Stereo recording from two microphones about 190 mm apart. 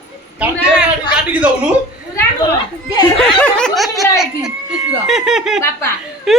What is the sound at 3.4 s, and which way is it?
Speech, 5° left (ahead or behind).